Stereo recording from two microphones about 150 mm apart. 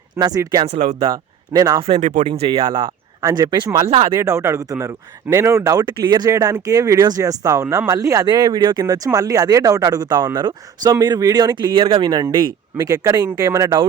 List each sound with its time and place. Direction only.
0.2 s speech: 25° right (ahead or behind)
0.7 s speech: 55° right (ahead or behind)
1.1 s speech: 25° right (ahead or behind)
2.0 s speech: 60° right (ahead or behind)
2.2 s speech: 40° right (ahead or behind)
3.8 s speech: 45° right (ahead or behind)
4.1 s speech: 20° right (ahead or behind)